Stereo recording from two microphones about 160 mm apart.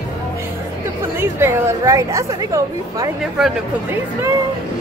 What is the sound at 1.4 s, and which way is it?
A woman's voice, 20° right (ahead or behind).